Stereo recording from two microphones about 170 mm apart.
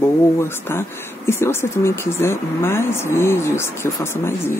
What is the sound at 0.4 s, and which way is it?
Speech, 15° left (ahead or behind).